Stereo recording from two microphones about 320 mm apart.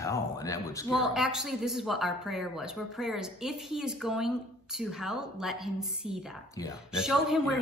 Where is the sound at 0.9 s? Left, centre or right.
Centre.